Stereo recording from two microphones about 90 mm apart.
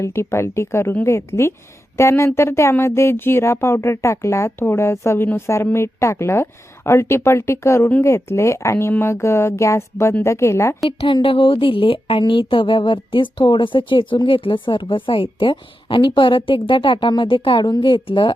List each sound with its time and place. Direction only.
0.0 s speech: 30° left (ahead or behind)
10.8 s speech: 70° left (ahead or behind)
12.2 s speech: 70° left (ahead or behind)
17.6 s a woman's voice: 50° left (ahead or behind); by 18.3 s 70° left (ahead or behind)